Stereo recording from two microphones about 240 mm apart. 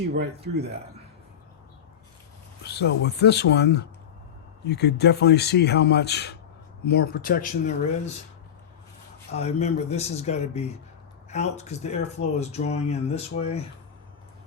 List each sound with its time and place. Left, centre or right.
0.1 s speech: right
2.6 s speech: left
9.3 s speech: left